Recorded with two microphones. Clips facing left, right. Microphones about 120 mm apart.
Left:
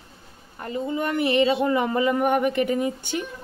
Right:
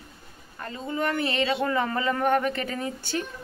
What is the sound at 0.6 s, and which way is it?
Speech, 20° left (ahead or behind).